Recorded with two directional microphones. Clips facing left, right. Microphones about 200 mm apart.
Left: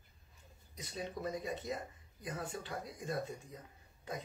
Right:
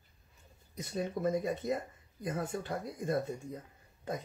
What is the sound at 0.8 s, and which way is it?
Speech, 50° right (ahead or behind).